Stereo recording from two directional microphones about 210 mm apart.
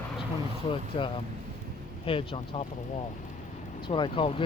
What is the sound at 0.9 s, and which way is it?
Speech, 25° left (ahead or behind).